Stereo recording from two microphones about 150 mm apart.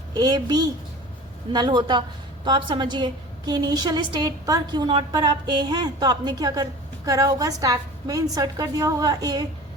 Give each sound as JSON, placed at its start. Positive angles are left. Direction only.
{"t": 0.1, "sound": "a woman's voice", "side_deg": -25}